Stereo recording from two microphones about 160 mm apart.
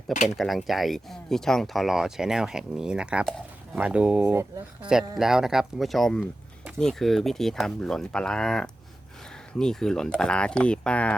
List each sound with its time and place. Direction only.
0.3 s speech: centre (ahead or behind)